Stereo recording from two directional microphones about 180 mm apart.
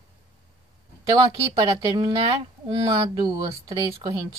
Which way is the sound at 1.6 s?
25° right (ahead or behind).